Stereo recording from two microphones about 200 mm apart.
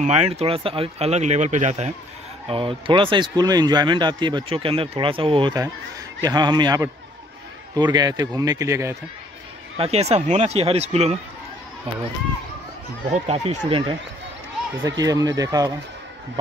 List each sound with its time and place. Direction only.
0.0 s speech: 30° right (ahead or behind); by 8.9 s 15° right (ahead or behind)
9.8 s speech: 30° right (ahead or behind)
13.1 s speech: 35° right (ahead or behind); by 15.7 s 20° right (ahead or behind)